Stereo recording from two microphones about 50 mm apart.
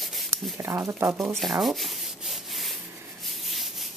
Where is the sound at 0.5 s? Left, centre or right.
Right.